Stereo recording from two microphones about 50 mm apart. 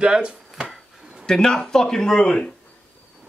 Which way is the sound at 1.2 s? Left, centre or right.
Centre.